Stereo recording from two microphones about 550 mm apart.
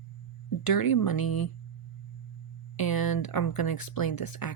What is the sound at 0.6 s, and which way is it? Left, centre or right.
Speech, left.